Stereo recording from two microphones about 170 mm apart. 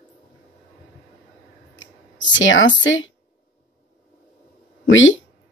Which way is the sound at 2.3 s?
90° left.